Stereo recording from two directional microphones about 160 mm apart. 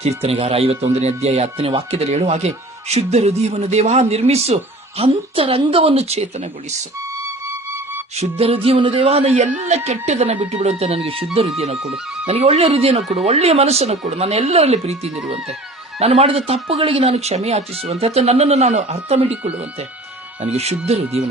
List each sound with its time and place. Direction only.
0.2 s speech: 40° right (ahead or behind)
8.1 s speech: 40° right (ahead or behind)
20.4 s speech: 40° right (ahead or behind)